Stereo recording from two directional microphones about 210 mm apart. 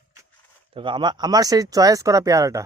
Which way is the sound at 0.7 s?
25° right (ahead or behind).